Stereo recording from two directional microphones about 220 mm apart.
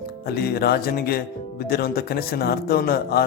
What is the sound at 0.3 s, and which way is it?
A man's voice, 45° left (ahead or behind).